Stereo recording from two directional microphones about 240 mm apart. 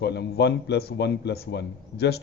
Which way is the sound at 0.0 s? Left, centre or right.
Left.